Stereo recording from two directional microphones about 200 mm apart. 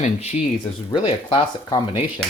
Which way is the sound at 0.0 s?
35° left (ahead or behind).